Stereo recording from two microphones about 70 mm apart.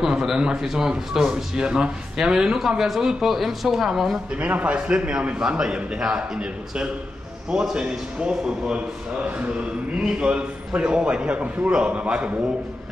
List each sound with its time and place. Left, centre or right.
0.0 s speech: centre
4.4 s speech: centre
10.0 s speech: centre